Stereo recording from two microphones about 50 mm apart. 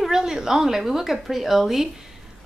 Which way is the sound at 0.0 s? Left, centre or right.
Centre.